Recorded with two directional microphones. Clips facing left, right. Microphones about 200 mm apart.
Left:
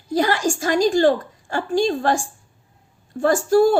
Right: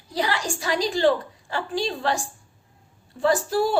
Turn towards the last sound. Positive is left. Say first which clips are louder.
# left 6 dB
turn(degrees=50)  # may be behind; listen again after turning